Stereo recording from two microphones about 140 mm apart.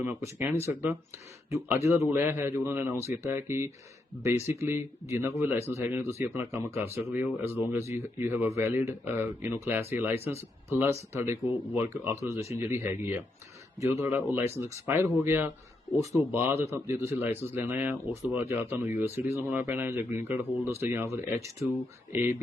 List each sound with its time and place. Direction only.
0.0 s speech: 15° right (ahead or behind)